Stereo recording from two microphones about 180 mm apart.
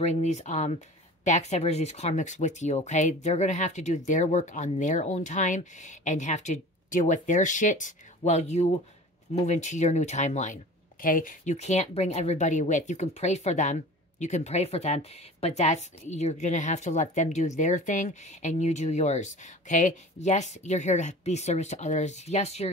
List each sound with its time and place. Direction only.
0.0 s speech: 40° left (ahead or behind)